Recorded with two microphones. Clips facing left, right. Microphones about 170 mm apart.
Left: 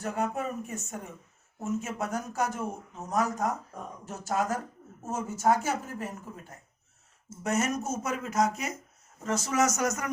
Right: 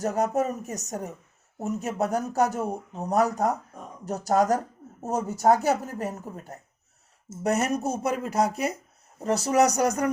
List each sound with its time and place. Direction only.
0.0 s speech: 40° right (ahead or behind)